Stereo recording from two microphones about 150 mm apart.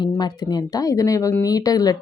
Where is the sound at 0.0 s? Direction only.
30° left (ahead or behind).